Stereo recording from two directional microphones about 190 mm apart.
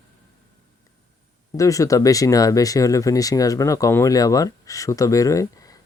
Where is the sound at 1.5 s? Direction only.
15° left (ahead or behind).